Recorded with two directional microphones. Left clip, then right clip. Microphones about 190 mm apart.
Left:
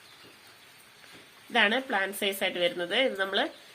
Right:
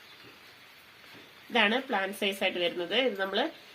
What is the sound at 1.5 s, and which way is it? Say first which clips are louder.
A woman's voice: left 1 dB; centre (ahead or behind).